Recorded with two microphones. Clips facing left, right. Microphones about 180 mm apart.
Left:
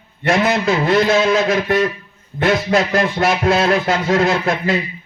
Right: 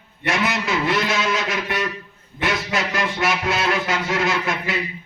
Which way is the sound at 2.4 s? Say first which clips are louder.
Left 8 dB; 55° left (ahead or behind).